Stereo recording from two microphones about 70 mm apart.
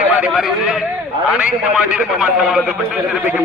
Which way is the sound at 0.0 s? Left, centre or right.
Right.